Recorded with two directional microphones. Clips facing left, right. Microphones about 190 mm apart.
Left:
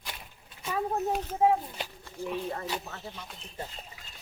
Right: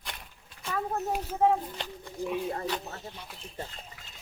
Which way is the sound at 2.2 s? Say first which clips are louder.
Right 2 dB; 15° right (ahead or behind).